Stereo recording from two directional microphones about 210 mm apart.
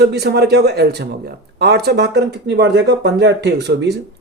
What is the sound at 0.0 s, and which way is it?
Speech, 50° right (ahead or behind).